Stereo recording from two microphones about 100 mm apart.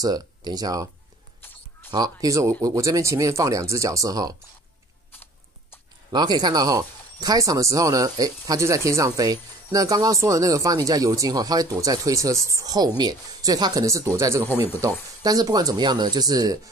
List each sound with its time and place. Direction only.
0.0 s speech: 40° right (ahead or behind)
1.9 s speech: 40° right (ahead or behind)
6.1 s speech: 45° right (ahead or behind)